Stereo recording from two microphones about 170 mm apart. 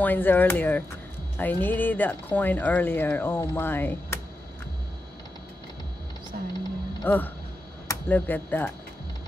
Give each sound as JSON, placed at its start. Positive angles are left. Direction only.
{"t": 0.0, "sound": "speech", "side_deg": 10}
{"t": 6.3, "sound": "music", "side_deg": -60}
{"t": 7.1, "sound": "speech", "side_deg": 10}